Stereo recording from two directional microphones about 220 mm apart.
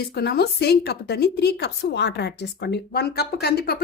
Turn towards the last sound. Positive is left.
turn(degrees=45)  # may be behind; listen again after turning